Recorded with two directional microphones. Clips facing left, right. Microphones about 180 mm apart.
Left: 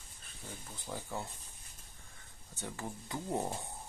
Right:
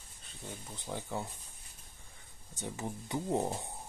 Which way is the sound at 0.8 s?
15° right (ahead or behind).